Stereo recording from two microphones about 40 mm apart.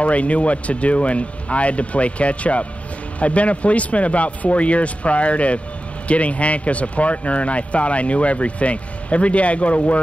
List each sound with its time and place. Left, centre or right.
0.0 s speech: left